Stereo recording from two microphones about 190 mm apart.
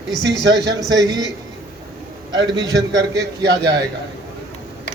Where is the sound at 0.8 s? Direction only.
20° right (ahead or behind).